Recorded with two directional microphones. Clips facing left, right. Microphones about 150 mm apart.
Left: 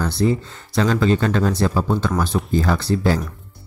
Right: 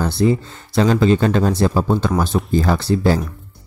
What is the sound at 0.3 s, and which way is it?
Speech, 25° right (ahead or behind).